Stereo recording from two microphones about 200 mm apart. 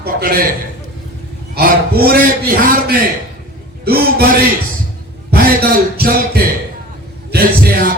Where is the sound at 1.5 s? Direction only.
50° right (ahead or behind).